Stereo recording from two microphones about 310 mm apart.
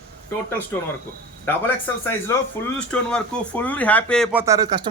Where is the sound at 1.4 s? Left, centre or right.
Centre.